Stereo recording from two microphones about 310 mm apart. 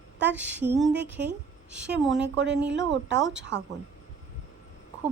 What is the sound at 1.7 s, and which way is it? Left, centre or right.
Speech, centre.